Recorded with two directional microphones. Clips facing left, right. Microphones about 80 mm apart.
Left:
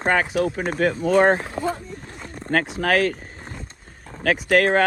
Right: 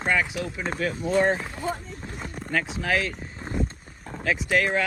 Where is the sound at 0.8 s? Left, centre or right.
Left.